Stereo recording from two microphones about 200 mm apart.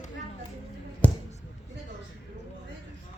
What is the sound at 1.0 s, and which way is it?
Basketball bounce, 5° left (ahead or behind).